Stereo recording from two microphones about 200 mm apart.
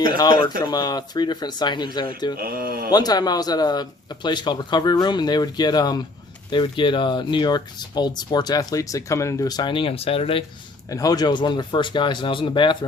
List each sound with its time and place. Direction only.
0.2 s speech: 20° left (ahead or behind)
2.4 s speech: 45° right (ahead or behind)
2.9 s speech: 20° left (ahead or behind)
10.8 s speech: 15° left (ahead or behind)